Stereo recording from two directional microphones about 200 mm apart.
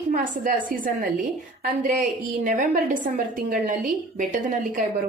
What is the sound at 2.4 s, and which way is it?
A woman's voice, 40° right (ahead or behind).